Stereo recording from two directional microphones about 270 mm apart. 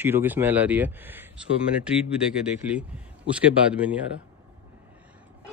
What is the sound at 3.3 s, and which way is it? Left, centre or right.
Speech, centre.